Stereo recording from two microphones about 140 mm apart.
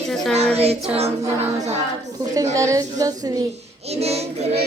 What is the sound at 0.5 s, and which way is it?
Child singing, 45° right (ahead or behind).